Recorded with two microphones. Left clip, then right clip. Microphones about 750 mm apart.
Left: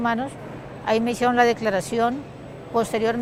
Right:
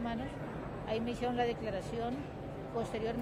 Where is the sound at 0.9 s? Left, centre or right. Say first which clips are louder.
Left 16 dB; left.